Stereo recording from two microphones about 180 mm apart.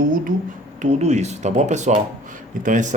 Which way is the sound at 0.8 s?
40° right (ahead or behind).